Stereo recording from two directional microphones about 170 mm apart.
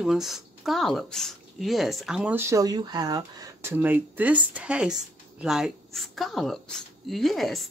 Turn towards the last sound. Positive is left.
turn(degrees=0)  # may be behind; listen again after turning